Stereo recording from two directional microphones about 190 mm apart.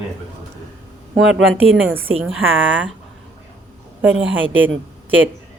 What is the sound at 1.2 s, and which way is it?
Speech, 85° right.